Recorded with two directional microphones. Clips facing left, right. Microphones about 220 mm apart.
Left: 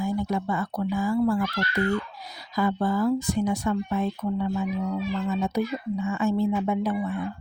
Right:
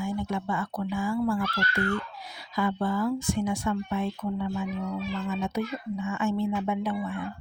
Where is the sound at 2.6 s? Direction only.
40° left (ahead or behind).